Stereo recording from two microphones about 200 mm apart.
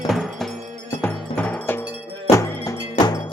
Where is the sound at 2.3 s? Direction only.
15° left (ahead or behind).